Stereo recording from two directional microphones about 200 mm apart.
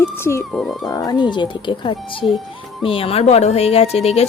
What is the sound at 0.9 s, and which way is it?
Speech, 20° left (ahead or behind).